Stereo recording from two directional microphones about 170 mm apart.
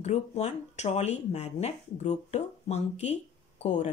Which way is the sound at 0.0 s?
40° left (ahead or behind).